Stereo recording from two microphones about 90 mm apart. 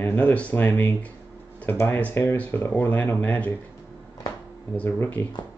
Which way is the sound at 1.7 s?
30° left (ahead or behind).